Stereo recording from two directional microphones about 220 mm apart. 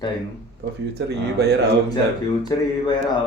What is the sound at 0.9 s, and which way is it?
Speech, 50° right (ahead or behind).